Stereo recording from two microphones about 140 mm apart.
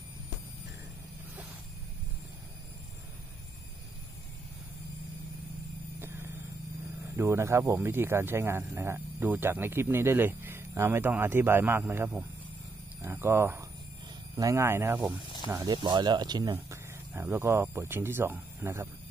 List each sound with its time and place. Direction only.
5.9 s a sound: 15° right (ahead or behind)
7.2 s speech: 20° right (ahead or behind)
15.5 s speech: 30° right (ahead or behind)
16.5 s speech: 15° right (ahead or behind)